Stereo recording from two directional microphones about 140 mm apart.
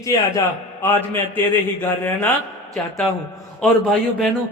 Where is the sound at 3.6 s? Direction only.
5° left (ahead or behind).